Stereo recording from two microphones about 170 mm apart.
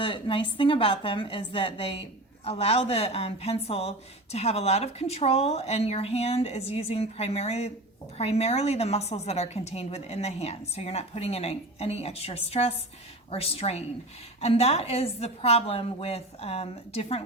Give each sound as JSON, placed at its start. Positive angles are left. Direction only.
{"t": 0.0, "sound": "a woman's voice", "side_deg": 30}